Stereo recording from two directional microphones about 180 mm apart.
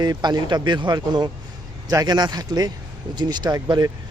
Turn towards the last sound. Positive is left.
turn(degrees=-20)  # may be behind; listen again after turning